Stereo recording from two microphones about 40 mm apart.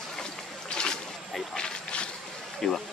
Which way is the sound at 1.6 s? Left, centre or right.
Left.